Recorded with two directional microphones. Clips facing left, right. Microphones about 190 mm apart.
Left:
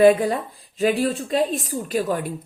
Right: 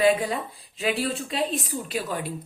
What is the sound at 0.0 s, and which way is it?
A woman's voice, 50° left (ahead or behind).